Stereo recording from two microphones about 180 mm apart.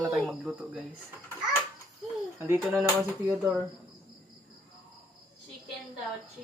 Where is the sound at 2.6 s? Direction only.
5° right (ahead or behind).